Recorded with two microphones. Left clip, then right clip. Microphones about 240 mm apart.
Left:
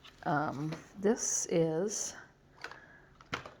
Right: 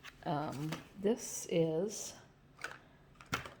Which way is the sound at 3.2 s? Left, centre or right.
Right.